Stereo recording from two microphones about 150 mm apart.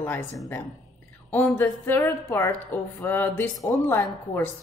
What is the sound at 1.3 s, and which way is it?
A woman's voice, 15° left (ahead or behind).